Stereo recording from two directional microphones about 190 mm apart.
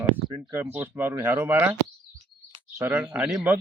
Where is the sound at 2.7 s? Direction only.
10° right (ahead or behind).